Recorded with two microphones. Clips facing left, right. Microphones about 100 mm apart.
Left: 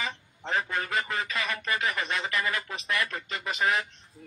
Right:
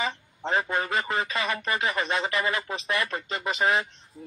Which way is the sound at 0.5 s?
25° right (ahead or behind).